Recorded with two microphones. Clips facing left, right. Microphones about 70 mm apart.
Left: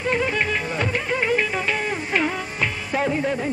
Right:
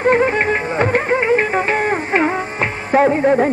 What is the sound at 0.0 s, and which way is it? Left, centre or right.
Music, right.